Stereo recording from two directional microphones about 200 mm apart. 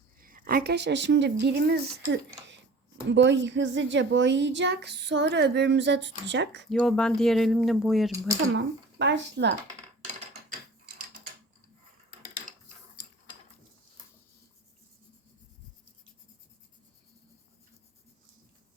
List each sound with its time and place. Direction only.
0.2 s a woman's voice: 45° right (ahead or behind); by 6.7 s 60° right (ahead or behind)
6.7 s speech: 5° left (ahead or behind)
8.5 s a woman's voice: 60° right (ahead or behind)